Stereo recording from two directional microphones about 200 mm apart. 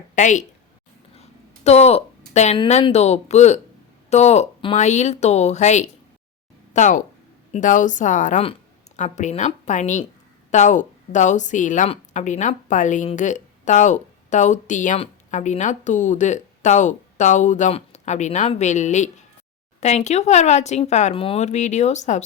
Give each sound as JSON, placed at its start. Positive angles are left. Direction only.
{"t": 0.2, "sound": "a woman's voice", "side_deg": 40}